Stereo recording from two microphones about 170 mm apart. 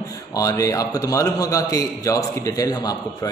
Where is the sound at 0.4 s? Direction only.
20° left (ahead or behind).